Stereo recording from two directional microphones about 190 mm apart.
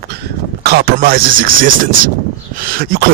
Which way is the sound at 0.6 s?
55° right (ahead or behind).